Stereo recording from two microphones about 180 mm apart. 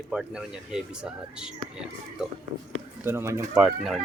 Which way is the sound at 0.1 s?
5° right (ahead or behind).